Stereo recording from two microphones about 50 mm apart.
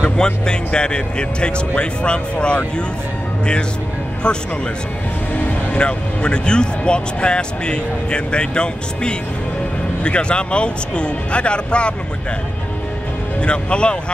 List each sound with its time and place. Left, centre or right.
0.0 s speech: centre
5.3 s music: left
5.8 s speech: left
13.4 s speech: left